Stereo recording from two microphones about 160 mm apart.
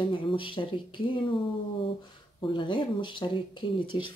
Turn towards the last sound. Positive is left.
turn(degrees=30)  # may be behind; listen again after turning